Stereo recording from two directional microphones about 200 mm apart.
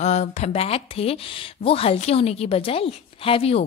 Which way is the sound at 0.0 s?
35° left (ahead or behind).